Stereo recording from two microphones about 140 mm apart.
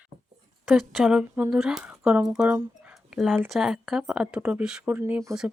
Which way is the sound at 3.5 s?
Centre (ahead or behind).